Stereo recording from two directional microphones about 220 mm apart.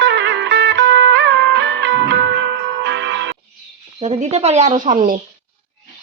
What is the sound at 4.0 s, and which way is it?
Speech, 30° right (ahead or behind).